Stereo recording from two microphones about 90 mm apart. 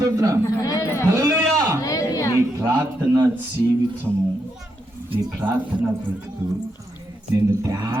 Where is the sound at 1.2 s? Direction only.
35° right (ahead or behind).